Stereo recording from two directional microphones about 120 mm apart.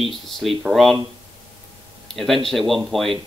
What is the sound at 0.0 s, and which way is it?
Speech, centre (ahead or behind).